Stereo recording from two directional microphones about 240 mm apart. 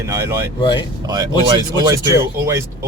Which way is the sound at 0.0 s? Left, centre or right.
Centre.